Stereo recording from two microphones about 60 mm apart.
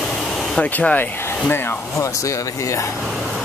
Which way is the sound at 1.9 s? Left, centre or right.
Left.